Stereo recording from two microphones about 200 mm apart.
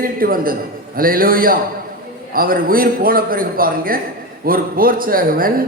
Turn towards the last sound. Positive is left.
turn(degrees=-45)  # may be behind; listen again after turning